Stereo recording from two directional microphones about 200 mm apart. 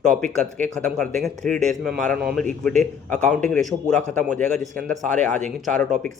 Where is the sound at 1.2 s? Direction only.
Centre (ahead or behind).